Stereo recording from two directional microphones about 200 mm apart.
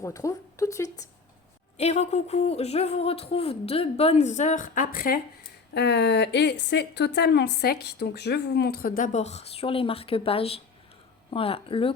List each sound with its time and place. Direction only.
0.0 s a woman's voice: 15° left (ahead or behind)
1.8 s speech: 35° left (ahead or behind)
5.7 s a woman's voice: 60° left (ahead or behind); by 11.9 s 25° left (ahead or behind)